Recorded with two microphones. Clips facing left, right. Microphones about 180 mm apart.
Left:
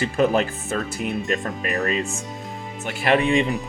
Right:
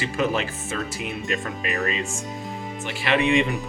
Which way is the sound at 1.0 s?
Centre (ahead or behind).